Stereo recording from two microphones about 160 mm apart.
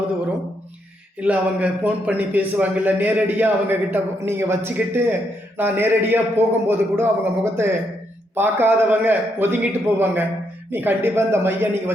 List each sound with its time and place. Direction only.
1.2 s a man's voice: 10° right (ahead or behind)